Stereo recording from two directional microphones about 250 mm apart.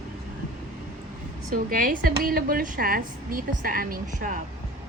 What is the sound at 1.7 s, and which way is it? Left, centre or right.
Speech, right.